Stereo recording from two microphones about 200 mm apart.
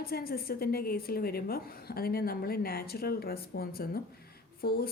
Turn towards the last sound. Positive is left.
turn(degrees=50)  # may be behind; listen again after turning